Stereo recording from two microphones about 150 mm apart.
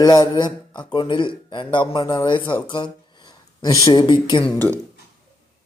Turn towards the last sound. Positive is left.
turn(degrees=10)  # may be behind; listen again after turning